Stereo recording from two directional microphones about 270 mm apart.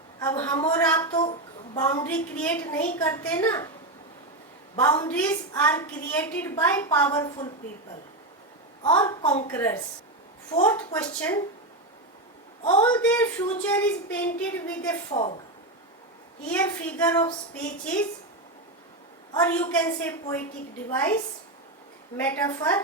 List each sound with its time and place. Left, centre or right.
0.2 s a sound: centre
3.0 s a woman's voice: centre
4.8 s a woman's voice: centre
8.8 s a woman's voice: centre
12.6 s a woman's voice: centre
13.0 s a woman's voice: centre
15.1 s a woman's voice: left
16.5 s a woman's voice: centre
19.3 s a woman's voice: centre
22.2 s a woman's voice: centre